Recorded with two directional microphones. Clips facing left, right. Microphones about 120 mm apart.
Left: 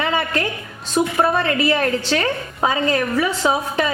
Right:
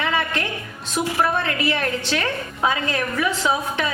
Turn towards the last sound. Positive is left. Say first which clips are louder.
# left 3 dB
turn(degrees=35)  # may be behind; listen again after turning